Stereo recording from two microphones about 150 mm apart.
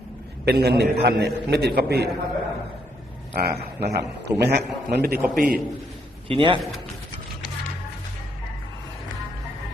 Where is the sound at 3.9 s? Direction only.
90° right.